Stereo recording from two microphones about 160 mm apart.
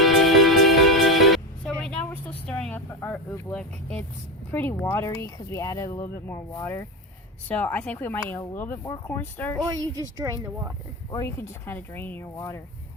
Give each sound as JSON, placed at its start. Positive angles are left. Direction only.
{"t": 0.0, "sound": "music", "side_deg": 0}
{"t": 1.8, "sound": "vehicle", "side_deg": 10}
{"t": 2.9, "sound": "speech", "side_deg": 15}
{"t": 9.6, "sound": "speech", "side_deg": -20}
{"t": 11.1, "sound": "speech", "side_deg": 15}